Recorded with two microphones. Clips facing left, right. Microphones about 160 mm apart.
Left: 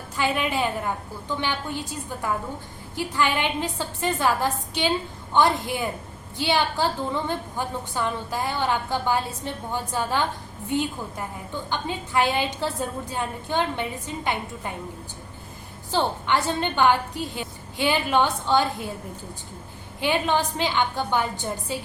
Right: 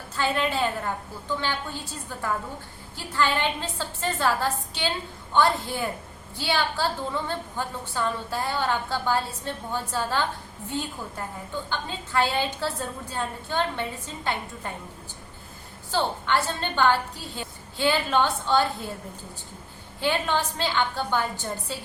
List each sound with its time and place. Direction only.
0.2 s a woman's voice: 15° left (ahead or behind)
15.9 s a woman's voice: 15° left (ahead or behind)
20.0 s a woman's voice: 15° left (ahead or behind)